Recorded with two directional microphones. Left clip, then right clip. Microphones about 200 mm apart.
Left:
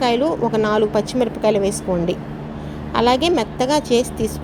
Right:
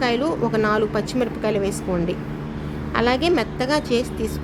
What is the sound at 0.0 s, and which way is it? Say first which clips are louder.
A woman's voice: left 3 dB; 10° left (ahead or behind).